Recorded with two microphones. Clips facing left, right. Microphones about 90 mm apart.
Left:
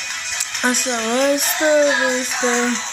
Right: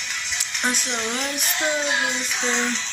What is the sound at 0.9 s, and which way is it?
Speech, 45° left (ahead or behind).